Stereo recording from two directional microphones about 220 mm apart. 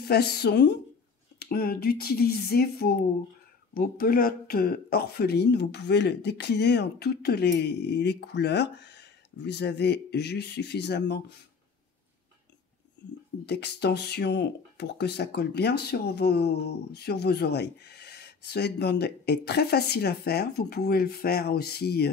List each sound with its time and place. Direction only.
0.0 s speech: 45° left (ahead or behind)
13.5 s speech: 50° left (ahead or behind)